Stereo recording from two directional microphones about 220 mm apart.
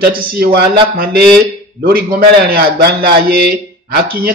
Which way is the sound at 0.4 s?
45° right (ahead or behind).